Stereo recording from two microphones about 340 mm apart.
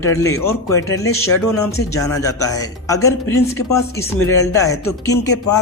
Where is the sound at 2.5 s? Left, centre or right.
Centre.